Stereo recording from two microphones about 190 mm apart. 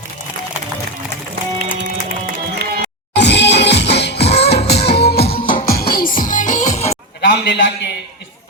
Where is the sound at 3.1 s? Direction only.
65° left (ahead or behind); by 6.9 s 35° left (ahead or behind).